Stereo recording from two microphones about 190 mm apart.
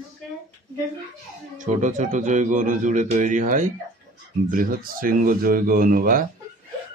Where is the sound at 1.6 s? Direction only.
40° right (ahead or behind).